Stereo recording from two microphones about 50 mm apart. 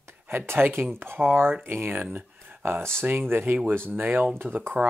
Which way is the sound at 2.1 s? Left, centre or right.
Right.